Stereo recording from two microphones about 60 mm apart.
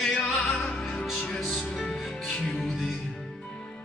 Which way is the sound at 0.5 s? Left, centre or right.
Left.